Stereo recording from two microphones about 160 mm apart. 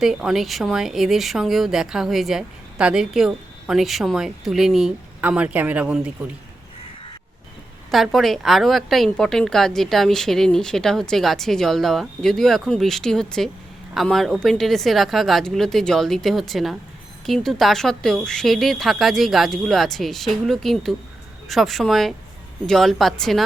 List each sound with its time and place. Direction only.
0.0 s speech: centre (ahead or behind)
7.9 s speech: centre (ahead or behind)